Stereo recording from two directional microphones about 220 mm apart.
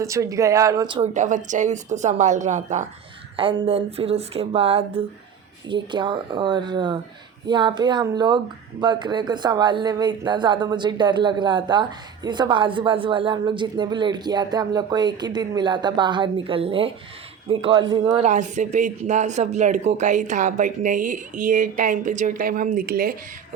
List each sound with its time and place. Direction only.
0.0 s speech: 15° right (ahead or behind)
1.1 s speech: 35° right (ahead or behind)
3.3 s speech: 25° right (ahead or behind)
18.3 s speech: 35° right (ahead or behind)